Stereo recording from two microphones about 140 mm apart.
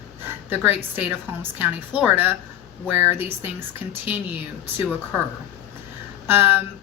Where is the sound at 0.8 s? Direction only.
10° right (ahead or behind).